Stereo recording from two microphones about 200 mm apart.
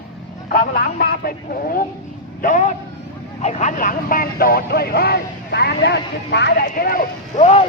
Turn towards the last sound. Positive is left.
turn(degrees=45)  # may be behind; listen again after turning